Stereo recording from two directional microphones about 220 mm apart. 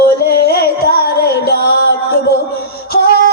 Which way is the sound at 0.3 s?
45° left (ahead or behind).